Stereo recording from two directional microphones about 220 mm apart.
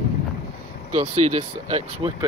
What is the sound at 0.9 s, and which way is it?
Speech, 30° right (ahead or behind).